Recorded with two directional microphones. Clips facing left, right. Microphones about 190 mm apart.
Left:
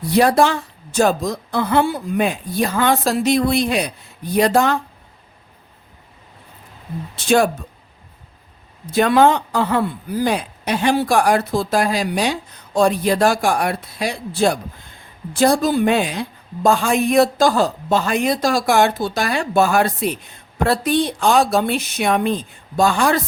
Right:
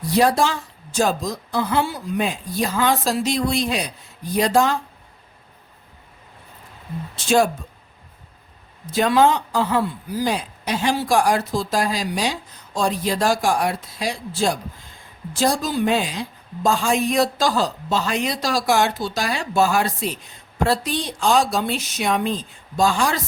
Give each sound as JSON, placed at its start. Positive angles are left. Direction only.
{"t": 0.1, "sound": "speech", "side_deg": 60}
{"t": 7.2, "sound": "speech", "side_deg": 60}
{"t": 8.9, "sound": "speech", "side_deg": 60}